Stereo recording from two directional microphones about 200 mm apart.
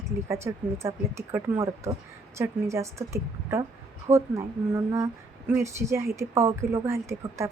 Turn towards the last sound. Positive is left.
turn(degrees=-15)  # may be behind; listen again after turning